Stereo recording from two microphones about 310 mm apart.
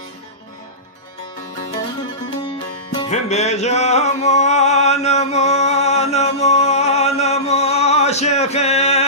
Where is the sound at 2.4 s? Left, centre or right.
Centre.